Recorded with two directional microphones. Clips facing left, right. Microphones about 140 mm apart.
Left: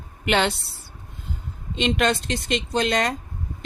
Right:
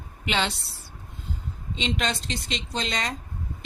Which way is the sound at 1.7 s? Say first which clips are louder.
Left 7 dB; 60° left (ahead or behind).